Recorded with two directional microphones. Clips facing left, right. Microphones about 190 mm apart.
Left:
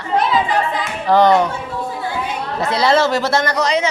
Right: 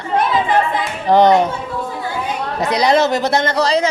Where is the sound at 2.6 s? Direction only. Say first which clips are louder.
Right 1 dB; 15° right (ahead or behind); by 3.8 s 30° right (ahead or behind).